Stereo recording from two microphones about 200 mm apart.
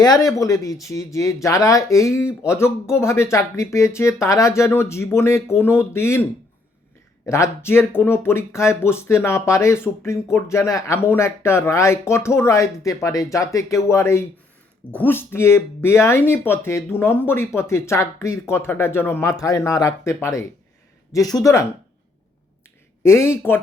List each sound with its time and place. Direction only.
0.0 s speech: 20° left (ahead or behind)
7.3 s speech: 15° left (ahead or behind)
23.0 s speech: 15° left (ahead or behind)